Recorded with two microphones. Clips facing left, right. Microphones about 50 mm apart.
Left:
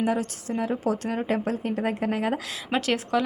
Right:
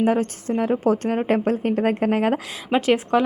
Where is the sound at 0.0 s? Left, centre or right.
Right.